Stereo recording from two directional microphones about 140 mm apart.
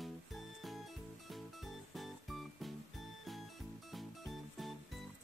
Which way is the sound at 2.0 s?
Centre (ahead or behind).